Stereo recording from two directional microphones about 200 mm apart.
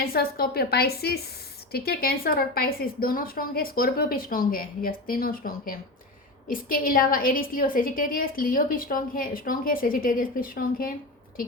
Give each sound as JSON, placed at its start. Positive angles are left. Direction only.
{"t": 0.0, "sound": "a woman's voice", "side_deg": 50}